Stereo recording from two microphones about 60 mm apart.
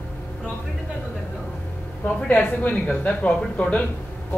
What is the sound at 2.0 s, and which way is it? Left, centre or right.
A woman's voice, left.